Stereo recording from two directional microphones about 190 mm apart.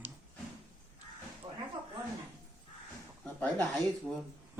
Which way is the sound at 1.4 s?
25° right (ahead or behind).